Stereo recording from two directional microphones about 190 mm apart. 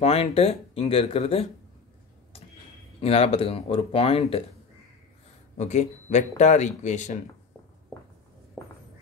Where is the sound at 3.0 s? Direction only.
30° left (ahead or behind).